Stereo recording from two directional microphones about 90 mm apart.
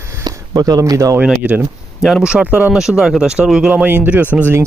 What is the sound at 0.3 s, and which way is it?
Speech, 45° right (ahead or behind).